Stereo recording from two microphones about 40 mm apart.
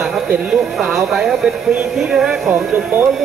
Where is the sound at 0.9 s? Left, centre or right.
Centre.